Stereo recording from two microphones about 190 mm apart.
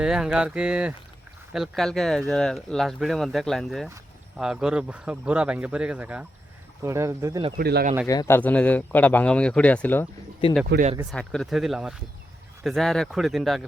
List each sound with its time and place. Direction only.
0.0 s speech: 5° right (ahead or behind)
7.6 s speech: 55° right (ahead or behind)
8.0 s speech: 20° left (ahead or behind)
10.7 s speech: 65° right (ahead or behind)
11.1 s speech: 5° left (ahead or behind)